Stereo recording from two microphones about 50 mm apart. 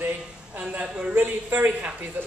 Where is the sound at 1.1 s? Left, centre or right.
Right.